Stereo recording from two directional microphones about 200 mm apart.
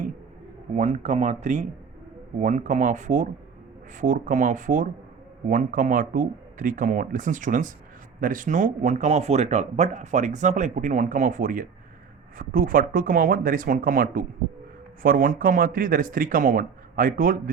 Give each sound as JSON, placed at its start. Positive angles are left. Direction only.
{"t": 0.8, "sound": "speech", "side_deg": -35}